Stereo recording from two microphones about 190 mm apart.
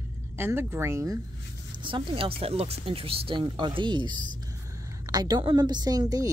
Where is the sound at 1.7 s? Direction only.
25° right (ahead or behind).